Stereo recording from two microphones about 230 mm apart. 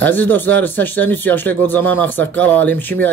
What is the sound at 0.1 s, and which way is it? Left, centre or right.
Speech, centre.